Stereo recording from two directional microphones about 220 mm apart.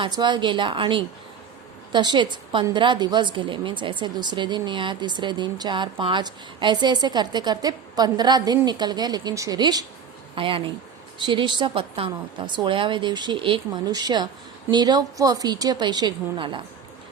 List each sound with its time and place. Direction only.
0.0 s a woman's voice: 20° right (ahead or behind)